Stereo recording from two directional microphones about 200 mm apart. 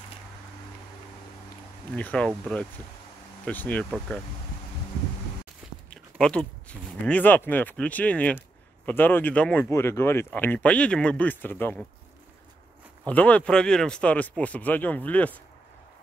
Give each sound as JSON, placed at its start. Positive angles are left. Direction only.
{"t": 1.9, "sound": "speech", "side_deg": 5}
{"t": 5.9, "sound": "speech", "side_deg": 5}
{"t": 13.0, "sound": "speech", "side_deg": 5}